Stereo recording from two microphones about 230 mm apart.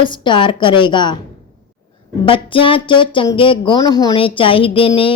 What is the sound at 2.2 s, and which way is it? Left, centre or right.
Speech, left.